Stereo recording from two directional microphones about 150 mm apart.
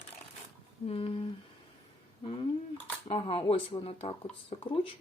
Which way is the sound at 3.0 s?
35° left (ahead or behind).